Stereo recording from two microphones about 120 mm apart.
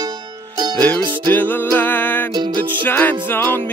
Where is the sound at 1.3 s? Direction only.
15° left (ahead or behind).